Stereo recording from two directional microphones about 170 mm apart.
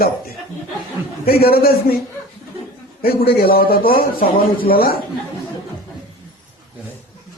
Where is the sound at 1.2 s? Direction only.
65° left (ahead or behind).